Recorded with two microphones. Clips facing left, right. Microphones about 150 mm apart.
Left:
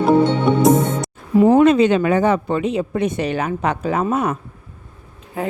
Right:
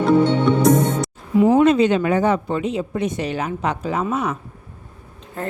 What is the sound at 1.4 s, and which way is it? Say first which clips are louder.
Speech: left 2 dB; 55° left (ahead or behind).